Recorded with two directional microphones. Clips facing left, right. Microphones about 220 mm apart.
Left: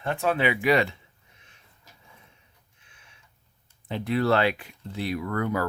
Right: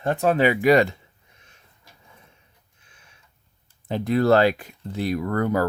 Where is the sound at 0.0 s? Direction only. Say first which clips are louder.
Right 5 dB; 40° right (ahead or behind).